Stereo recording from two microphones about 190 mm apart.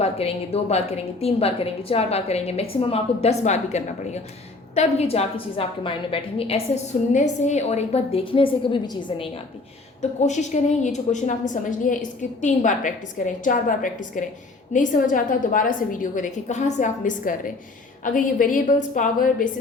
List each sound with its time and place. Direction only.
0.0 s a woman's voice: 30° left (ahead or behind)
10.0 s a woman's voice: 35° left (ahead or behind)